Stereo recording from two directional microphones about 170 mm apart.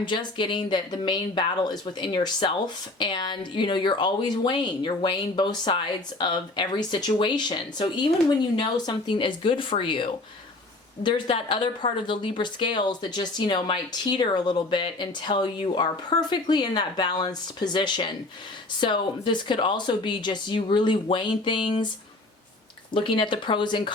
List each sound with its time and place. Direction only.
0.0 s speech: 30° left (ahead or behind)
23.0 s speech: 30° left (ahead or behind)